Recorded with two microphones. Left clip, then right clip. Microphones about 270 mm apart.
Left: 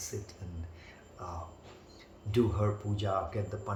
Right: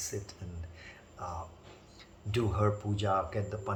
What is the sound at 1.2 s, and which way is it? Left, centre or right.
Speech, centre.